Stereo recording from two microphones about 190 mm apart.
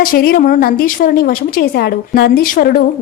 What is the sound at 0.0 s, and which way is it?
A woman's voice, 50° left (ahead or behind).